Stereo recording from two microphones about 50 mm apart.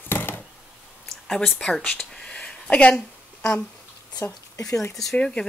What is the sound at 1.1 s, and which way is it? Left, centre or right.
Speech, centre.